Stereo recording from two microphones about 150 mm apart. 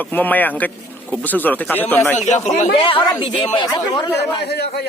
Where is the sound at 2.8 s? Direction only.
35° left (ahead or behind).